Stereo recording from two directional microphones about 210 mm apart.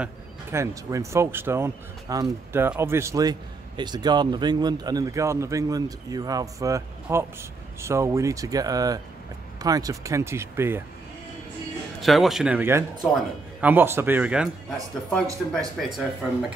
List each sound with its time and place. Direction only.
0.0 s speech: 10° right (ahead or behind)
12.0 s speech: centre (ahead or behind)
15.8 s speech: centre (ahead or behind)